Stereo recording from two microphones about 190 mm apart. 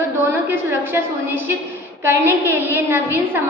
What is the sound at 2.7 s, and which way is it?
Speech, 10° right (ahead or behind).